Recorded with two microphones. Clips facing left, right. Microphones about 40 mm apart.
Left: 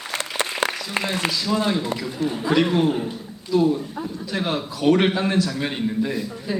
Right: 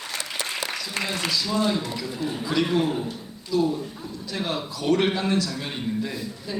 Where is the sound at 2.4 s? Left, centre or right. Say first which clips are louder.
Left 4 dB; left.